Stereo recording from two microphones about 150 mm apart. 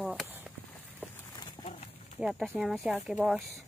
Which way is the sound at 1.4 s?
30° left (ahead or behind).